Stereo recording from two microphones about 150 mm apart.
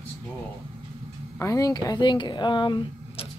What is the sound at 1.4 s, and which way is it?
Speech, 20° left (ahead or behind).